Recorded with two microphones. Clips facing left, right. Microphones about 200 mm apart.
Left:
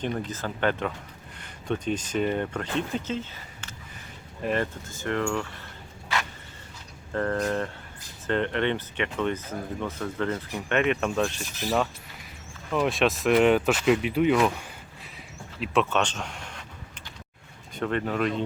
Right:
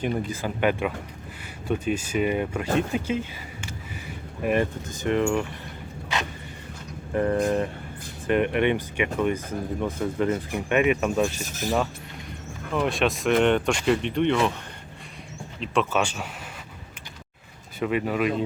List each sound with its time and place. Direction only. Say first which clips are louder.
0.0 s speech: right 3 dB; 10° right (ahead or behind)
7.1 s speech: right 4 dB; 15° right (ahead or behind)
11.4 s a sound: right 3 dB; 45° right (ahead or behind)
12.7 s speech: even; centre (ahead or behind)
15.6 s speech: even; centre (ahead or behind)
17.7 s speech: right 2 dB; 5° right (ahead or behind)